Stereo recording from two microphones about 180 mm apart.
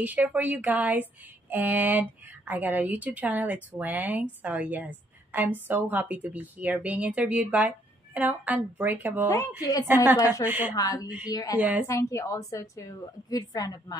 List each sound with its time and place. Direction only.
0.0 s a woman's voice: 10° right (ahead or behind)
9.3 s a woman's voice: 20° left (ahead or behind)
9.8 s a woman's voice: 10° right (ahead or behind)
10.1 s a woman's voice: 20° left (ahead or behind)
10.4 s a woman's voice: 10° right (ahead or behind)
10.7 s a woman's voice: 20° left (ahead or behind)